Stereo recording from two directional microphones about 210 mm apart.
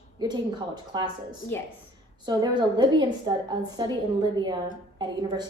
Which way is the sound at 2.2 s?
20° right (ahead or behind).